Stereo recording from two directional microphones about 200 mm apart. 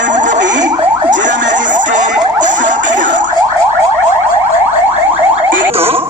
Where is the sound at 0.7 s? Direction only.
25° right (ahead or behind).